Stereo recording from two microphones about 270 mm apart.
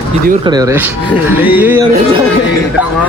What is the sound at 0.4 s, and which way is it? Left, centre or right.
Speech, centre.